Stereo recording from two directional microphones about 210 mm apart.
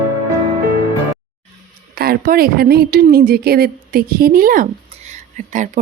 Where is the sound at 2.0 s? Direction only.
45° right (ahead or behind).